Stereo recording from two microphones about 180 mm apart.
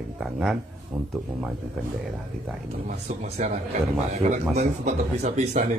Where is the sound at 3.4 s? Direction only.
40° right (ahead or behind).